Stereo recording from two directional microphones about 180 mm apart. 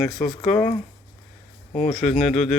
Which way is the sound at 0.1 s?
Centre (ahead or behind).